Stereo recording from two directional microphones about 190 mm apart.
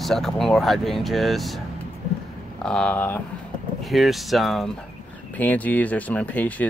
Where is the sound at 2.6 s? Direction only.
5° left (ahead or behind).